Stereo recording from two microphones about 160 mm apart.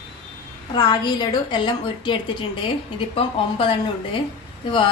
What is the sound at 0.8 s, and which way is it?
A woman's voice, 25° left (ahead or behind).